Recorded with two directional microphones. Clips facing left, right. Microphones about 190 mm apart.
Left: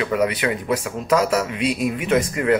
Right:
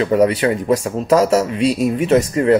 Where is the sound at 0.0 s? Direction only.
35° right (ahead or behind).